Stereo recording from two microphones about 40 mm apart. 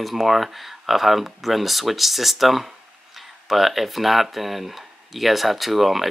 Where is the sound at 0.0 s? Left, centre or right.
Centre.